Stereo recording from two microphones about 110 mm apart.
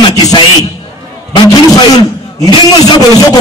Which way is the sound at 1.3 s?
35° left (ahead or behind).